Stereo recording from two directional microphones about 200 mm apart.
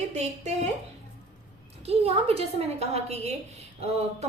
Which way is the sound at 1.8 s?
30° right (ahead or behind).